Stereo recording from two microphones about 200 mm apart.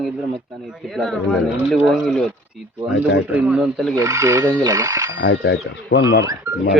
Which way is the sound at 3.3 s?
5° right (ahead or behind).